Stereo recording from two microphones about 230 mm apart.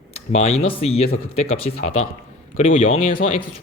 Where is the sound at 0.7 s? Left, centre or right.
Left.